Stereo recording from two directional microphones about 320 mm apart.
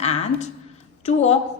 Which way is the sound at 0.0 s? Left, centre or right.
Left.